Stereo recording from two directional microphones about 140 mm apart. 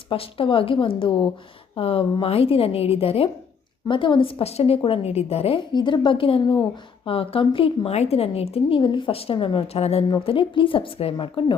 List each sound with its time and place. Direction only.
0.1 s a woman's voice: 40° left (ahead or behind)
5.7 s a woman's voice: 35° left (ahead or behind)